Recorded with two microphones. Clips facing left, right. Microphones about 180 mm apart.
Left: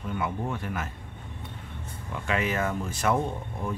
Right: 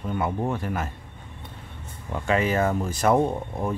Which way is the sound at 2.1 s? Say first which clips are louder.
Right 5 dB; 35° right (ahead or behind).